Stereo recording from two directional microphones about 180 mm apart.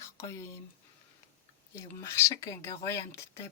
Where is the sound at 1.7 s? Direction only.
15° left (ahead or behind).